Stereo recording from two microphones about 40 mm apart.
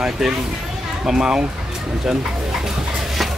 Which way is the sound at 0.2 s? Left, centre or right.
Centre.